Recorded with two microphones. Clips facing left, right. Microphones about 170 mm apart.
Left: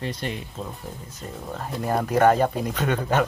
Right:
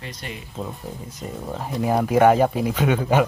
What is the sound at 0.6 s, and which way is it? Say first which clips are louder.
Speech: right 3 dB; 15° right (ahead or behind).